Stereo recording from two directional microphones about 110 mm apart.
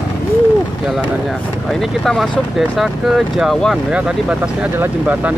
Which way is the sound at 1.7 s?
5° left (ahead or behind).